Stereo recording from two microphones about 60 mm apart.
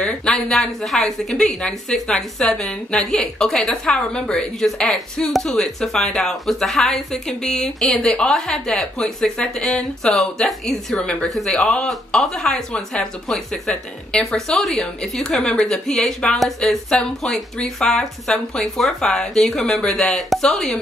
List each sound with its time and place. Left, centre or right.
0.0 s speech: centre
11.0 s a woman's voice: left
11.2 s a woman's voice: centre
11.5 s speech: centre
15.4 s a woman's voice: centre